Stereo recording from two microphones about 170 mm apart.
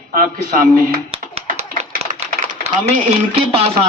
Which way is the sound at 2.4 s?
60° right (ahead or behind).